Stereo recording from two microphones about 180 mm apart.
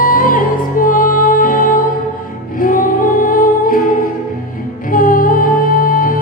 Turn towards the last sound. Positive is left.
turn(degrees=50)  # may be behind; listen again after turning